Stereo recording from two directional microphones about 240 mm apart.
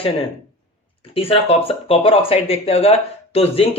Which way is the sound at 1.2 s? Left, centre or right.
Left.